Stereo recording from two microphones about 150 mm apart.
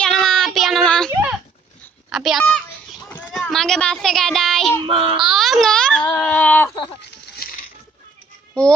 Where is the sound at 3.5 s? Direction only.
5° left (ahead or behind).